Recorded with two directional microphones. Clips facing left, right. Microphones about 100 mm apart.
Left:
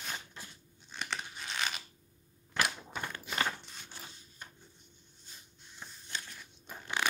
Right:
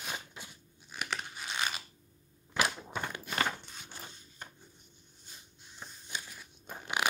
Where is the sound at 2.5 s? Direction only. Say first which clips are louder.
Right 2 dB; 15° right (ahead or behind).